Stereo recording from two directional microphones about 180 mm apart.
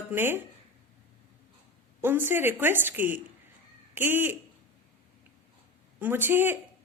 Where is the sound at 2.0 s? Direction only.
10° right (ahead or behind).